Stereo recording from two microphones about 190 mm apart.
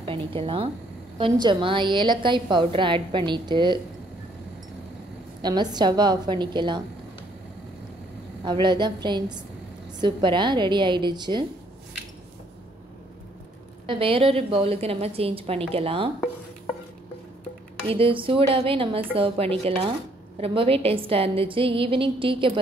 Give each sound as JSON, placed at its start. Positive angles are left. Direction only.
{"t": 0.0, "sound": "a woman's voice", "side_deg": -30}
{"t": 5.4, "sound": "a woman's voice", "side_deg": -20}
{"t": 8.5, "sound": "a woman's voice", "side_deg": -25}
{"t": 13.8, "sound": "a woman's voice", "side_deg": -30}
{"t": 17.8, "sound": "a woman's voice", "side_deg": -30}